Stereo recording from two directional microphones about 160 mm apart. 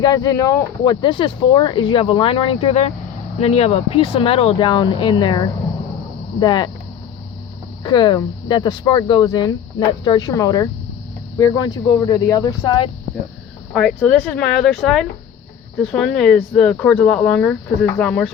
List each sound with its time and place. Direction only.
0.0 s speech: 25° left (ahead or behind)
7.9 s speech: 30° left (ahead or behind)
13.7 s speech: 5° left (ahead or behind)